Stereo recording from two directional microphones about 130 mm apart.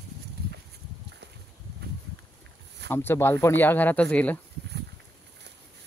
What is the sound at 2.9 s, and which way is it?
Speech, 20° left (ahead or behind).